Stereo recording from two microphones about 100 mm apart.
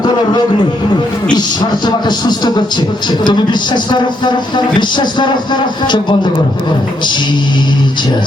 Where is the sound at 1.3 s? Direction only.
45° left (ahead or behind).